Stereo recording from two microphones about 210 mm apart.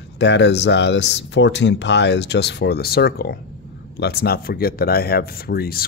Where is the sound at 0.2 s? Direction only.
55° left (ahead or behind).